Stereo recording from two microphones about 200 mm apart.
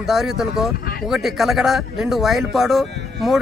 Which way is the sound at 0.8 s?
50° left (ahead or behind).